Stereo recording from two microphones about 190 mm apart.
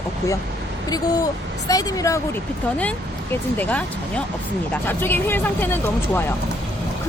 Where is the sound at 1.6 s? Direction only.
20° left (ahead or behind).